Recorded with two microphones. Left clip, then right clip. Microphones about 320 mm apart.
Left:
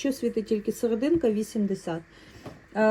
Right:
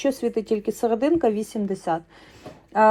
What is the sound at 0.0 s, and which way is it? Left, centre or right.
Speech, centre.